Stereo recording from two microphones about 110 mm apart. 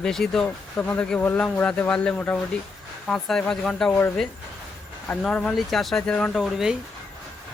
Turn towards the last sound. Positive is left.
turn(degrees=-5)  # may be behind; listen again after turning